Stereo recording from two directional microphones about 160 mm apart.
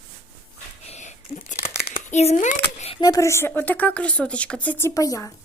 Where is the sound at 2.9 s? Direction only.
25° left (ahead or behind).